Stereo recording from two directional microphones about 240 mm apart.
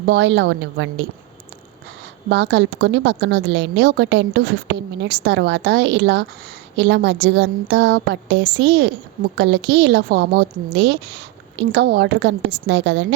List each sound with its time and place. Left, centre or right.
0.1 s a woman's voice: right
2.3 s a woman's voice: right
11.7 s a woman's voice: right